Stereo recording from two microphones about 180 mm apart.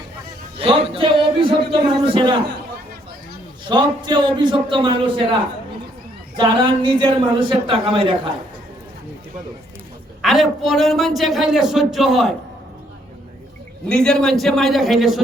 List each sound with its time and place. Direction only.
0.6 s music: 30° right (ahead or behind)
2.0 s a woman's voice: 25° right (ahead or behind)
3.7 s a woman's voice: 25° right (ahead or behind)
6.3 s a woman's voice: 25° right (ahead or behind)
10.2 s a man's voice: centre (ahead or behind)
13.8 s a man's voice: 5° left (ahead or behind)